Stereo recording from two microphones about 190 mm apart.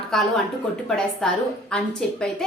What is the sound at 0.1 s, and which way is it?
A woman's voice, centre (ahead or behind).